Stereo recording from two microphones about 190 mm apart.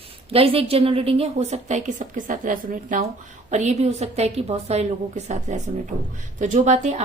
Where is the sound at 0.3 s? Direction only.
30° right (ahead or behind).